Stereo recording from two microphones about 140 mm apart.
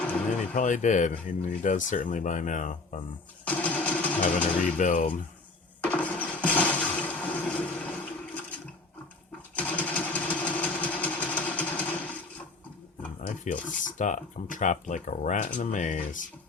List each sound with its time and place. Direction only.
0.5 s speech: 65° left (ahead or behind)
3.4 s a sound: 10° left (ahead or behind)
4.8 s speech: 70° left (ahead or behind)
5.8 s toilet flush: 10° left (ahead or behind)
9.6 s engine: 10° left (ahead or behind)
13.2 s filing: 70° left (ahead or behind)
13.7 s speech: 65° left (ahead or behind)